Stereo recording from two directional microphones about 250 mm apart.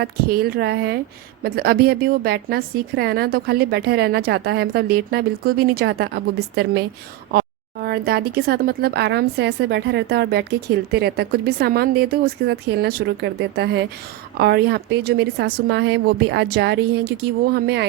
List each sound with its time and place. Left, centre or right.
0.0 s a woman's voice: right